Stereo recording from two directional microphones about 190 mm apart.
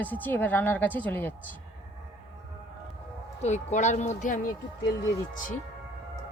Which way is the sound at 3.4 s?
35° left (ahead or behind).